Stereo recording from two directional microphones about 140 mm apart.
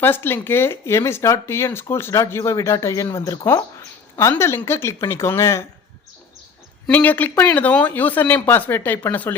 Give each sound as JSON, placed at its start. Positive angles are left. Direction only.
{"t": 0.0, "sound": "speech", "side_deg": 15}
{"t": 6.8, "sound": "speech", "side_deg": 10}